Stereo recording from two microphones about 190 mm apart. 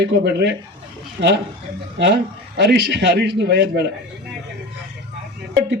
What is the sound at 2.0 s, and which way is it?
Speech, 60° right (ahead or behind).